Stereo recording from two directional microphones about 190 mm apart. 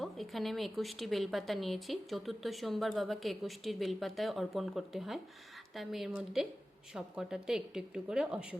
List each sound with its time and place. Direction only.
0.0 s speech: centre (ahead or behind)